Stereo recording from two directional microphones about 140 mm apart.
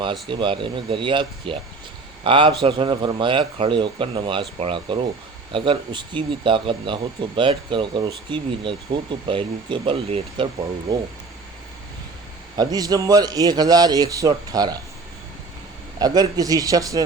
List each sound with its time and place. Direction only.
0.0 s speech: 35° right (ahead or behind)
12.5 s a man's voice: 25° right (ahead or behind)
16.0 s a man's voice: 30° right (ahead or behind)